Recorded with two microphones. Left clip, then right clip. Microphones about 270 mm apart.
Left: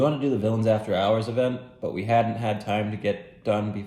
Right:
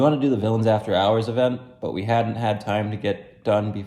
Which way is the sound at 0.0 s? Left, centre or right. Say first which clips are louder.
Right 3 dB; centre.